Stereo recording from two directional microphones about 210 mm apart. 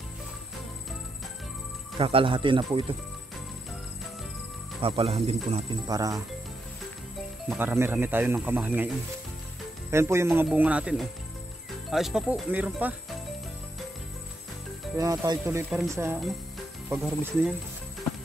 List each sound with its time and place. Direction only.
2.0 s speech: 25° right (ahead or behind)
4.8 s speech: 25° right (ahead or behind)
5.9 s speech: 15° right (ahead or behind)
7.4 s speech: 10° right (ahead or behind)
9.8 s speech: 15° right (ahead or behind)
15.0 s speech: 15° right (ahead or behind)
17.2 s speech: 5° right (ahead or behind)